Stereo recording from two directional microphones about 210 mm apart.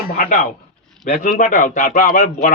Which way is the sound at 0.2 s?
40° left (ahead or behind).